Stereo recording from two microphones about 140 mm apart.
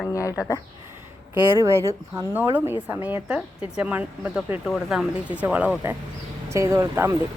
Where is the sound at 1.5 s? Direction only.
20° right (ahead or behind).